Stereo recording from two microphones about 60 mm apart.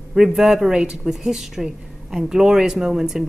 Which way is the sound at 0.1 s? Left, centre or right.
Centre.